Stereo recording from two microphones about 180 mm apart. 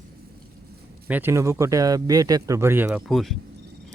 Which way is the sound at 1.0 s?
10° right (ahead or behind).